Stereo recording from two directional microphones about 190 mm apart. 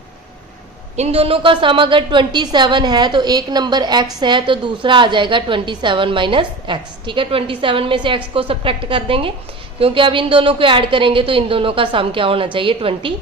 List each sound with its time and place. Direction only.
0.9 s a woman's voice: 35° right (ahead or behind)